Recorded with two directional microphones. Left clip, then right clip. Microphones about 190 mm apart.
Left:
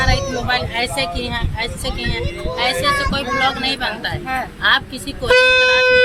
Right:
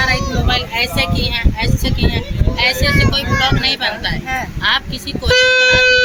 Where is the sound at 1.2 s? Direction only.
5° left (ahead or behind).